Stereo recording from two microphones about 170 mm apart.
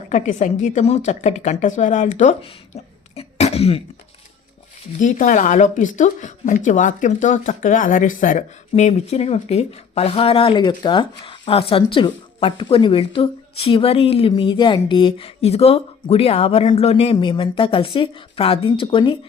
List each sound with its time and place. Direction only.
0.1 s a woman's voice: 45° left (ahead or behind)
3.2 s cough: 40° left (ahead or behind)
4.9 s speech: 50° left (ahead or behind); by 19.1 s 30° left (ahead or behind)